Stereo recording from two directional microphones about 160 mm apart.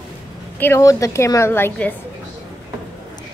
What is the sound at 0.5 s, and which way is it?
A woman's voice, 15° left (ahead or behind).